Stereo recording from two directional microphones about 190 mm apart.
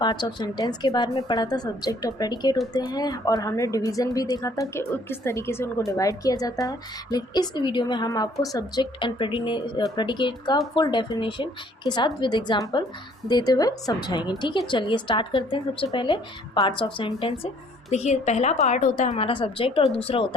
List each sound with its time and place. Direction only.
0.0 s a woman's voice: 25° left (ahead or behind)